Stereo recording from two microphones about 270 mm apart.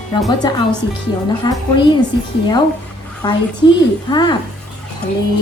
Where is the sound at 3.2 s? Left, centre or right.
Centre.